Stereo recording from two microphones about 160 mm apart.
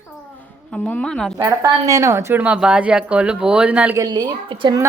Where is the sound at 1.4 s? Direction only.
20° right (ahead or behind).